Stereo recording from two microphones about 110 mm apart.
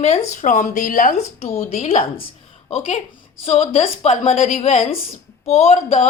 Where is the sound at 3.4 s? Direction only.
90° left.